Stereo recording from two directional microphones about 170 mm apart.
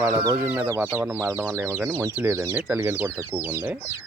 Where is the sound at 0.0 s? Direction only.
20° right (ahead or behind).